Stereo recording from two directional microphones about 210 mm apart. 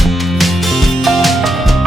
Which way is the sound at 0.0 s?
Centre (ahead or behind).